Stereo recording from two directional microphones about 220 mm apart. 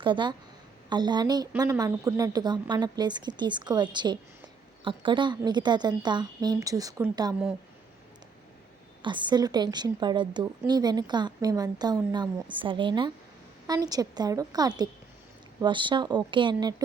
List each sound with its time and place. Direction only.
0.0 s a woman's voice: 20° right (ahead or behind)
9.0 s a woman's voice: 20° right (ahead or behind)